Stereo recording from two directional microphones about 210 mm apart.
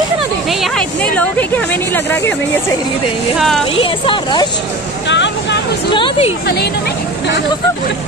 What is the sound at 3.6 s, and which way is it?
Speech, 25° left (ahead or behind).